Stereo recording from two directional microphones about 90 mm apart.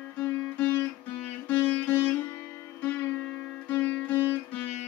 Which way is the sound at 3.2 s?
20° left (ahead or behind).